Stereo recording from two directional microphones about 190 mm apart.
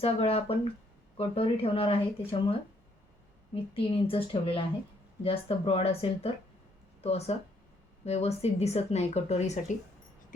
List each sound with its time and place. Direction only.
0.0 s a woman's voice: 30° left (ahead or behind)